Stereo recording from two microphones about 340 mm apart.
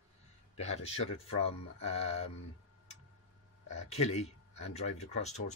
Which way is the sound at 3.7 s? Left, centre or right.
Centre.